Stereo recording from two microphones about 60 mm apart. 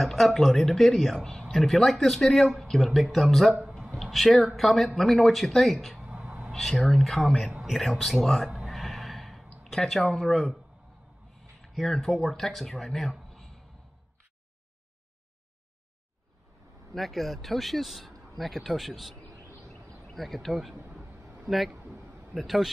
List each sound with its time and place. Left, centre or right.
0.0 s speech: centre
3.9 s a sound: centre
4.6 s speech: centre
6.0 s a sound: right
6.5 s speech: centre
8.5 s a sound: centre
9.6 s speech: centre
11.6 s speech: centre
16.9 s speech: centre
20.2 s speech: centre
20.9 s a sound: right
21.5 s speech: centre
21.7 s a man's voice: right
22.3 s speech: centre